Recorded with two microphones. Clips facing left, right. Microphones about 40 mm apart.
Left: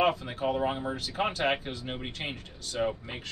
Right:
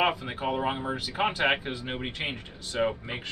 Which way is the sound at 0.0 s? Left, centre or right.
Centre.